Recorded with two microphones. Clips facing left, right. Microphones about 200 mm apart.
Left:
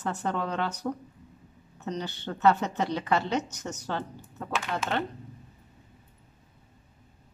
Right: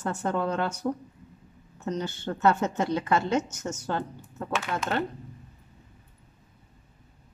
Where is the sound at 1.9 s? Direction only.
45° right (ahead or behind).